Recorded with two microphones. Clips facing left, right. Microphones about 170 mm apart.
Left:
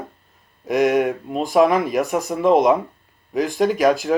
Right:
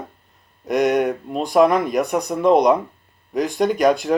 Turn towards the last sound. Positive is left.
turn(degrees=0)  # may be behind; listen again after turning